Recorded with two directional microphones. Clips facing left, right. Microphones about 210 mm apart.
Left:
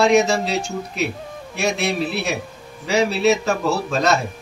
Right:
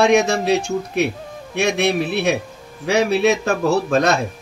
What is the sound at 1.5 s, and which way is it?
A man's voice, 60° right (ahead or behind).